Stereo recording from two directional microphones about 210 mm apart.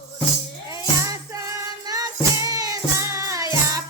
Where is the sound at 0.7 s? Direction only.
15° right (ahead or behind).